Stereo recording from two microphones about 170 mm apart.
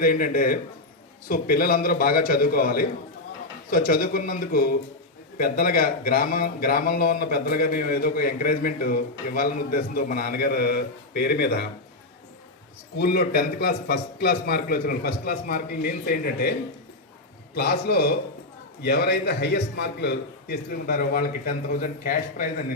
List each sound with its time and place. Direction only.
0.0 s a man's voice: 55° left (ahead or behind); by 11.7 s 70° left (ahead or behind)
13.0 s a man's voice: 65° left (ahead or behind)